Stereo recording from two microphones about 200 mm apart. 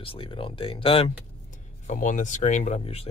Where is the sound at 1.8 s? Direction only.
40° left (ahead or behind).